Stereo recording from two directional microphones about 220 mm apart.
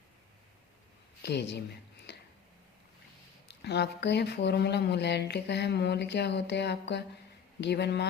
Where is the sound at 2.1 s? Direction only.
50° left (ahead or behind).